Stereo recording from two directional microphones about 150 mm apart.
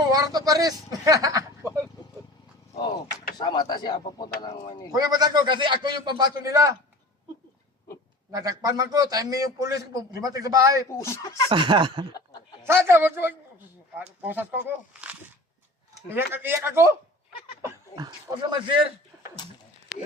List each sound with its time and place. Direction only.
0.1 s speech: 25° right (ahead or behind)
3.3 s speech: 30° left (ahead or behind)
4.9 s a man's voice: 25° right (ahead or behind)
8.3 s a man's voice: 25° right (ahead or behind)
10.8 s speech: 20° left (ahead or behind)
11.4 s speech: 30° right (ahead or behind)
12.1 s snicker: 30° left (ahead or behind)
12.6 s speech: 15° right (ahead or behind)
16.0 s speech: 15° right (ahead or behind)
17.6 s dog: 30° right (ahead or behind)
18.5 s speech: 35° right (ahead or behind)